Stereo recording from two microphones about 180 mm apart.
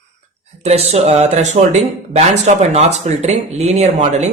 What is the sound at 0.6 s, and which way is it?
Speech, 35° right (ahead or behind).